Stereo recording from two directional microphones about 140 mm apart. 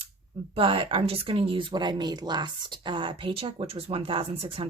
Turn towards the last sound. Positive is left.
turn(degrees=-40)  # may be behind; listen again after turning